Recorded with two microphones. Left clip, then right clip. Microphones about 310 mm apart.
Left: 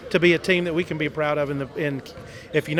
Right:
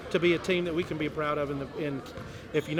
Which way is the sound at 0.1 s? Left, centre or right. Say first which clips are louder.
Left 7 dB; left.